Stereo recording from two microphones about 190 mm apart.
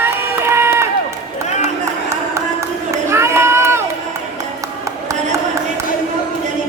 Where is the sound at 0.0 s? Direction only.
15° right (ahead or behind).